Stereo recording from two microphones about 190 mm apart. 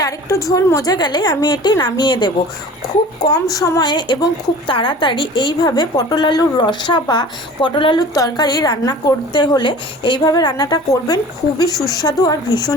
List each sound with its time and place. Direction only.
0.0 s a woman's voice: 15° left (ahead or behind)
3.5 s a woman's voice: 20° left (ahead or behind)